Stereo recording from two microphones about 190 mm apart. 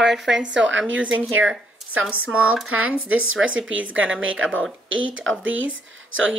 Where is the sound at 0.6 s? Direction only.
80° right.